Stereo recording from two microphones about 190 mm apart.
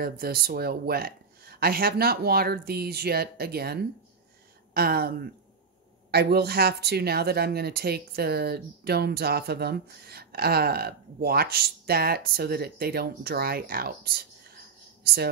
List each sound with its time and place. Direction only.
0.0 s speech: 50° right (ahead or behind)